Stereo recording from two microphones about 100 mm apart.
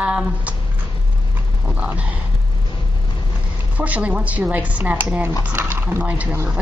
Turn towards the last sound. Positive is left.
turn(degrees=-15)  # may be behind; listen again after turning